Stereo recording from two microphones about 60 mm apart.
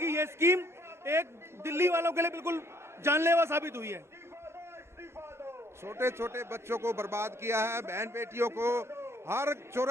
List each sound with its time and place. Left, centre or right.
0.0 s a man's voice: right
5.1 s a man's voice: right